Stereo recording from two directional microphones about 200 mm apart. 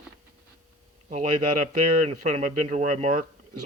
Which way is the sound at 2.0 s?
35° right (ahead or behind).